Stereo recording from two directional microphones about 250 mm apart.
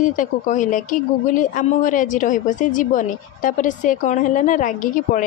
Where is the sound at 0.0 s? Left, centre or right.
Left.